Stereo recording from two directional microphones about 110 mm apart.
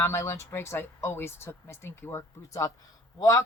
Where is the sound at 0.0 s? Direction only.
25° left (ahead or behind).